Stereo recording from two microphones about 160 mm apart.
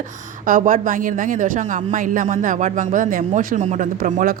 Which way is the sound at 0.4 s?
60° right (ahead or behind).